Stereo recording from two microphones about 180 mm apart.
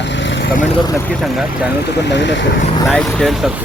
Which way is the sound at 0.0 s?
85° left.